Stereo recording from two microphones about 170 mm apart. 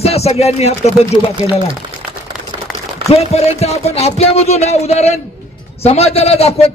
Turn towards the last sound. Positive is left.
turn(degrees=35)  # may be behind; listen again after turning